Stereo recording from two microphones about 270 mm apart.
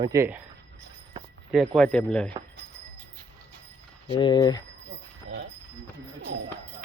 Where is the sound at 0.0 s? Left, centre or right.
Centre.